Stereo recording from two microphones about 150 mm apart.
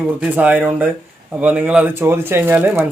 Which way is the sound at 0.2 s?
10° right (ahead or behind).